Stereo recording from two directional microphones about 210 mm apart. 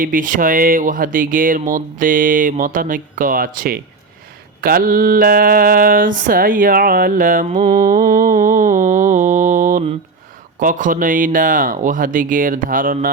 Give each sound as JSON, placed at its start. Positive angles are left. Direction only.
{"t": 0.0, "sound": "mantra", "side_deg": -40}